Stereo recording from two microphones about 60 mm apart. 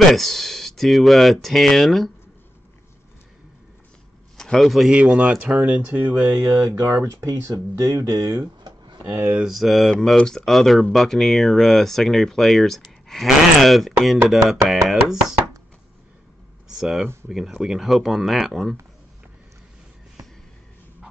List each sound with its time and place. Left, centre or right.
0.1 s speech: centre
4.4 s a man's voice: centre
4.9 s speech: centre
6.4 s speech: right
6.8 s speech: right
9.4 s speech: centre
16.7 s speech: centre